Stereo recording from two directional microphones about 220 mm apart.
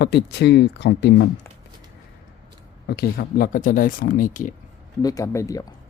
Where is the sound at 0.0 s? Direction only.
50° left (ahead or behind).